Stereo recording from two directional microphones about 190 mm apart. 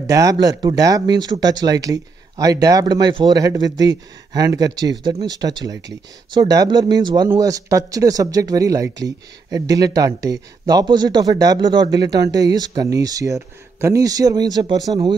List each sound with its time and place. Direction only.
0.0 s speech: 20° right (ahead or behind)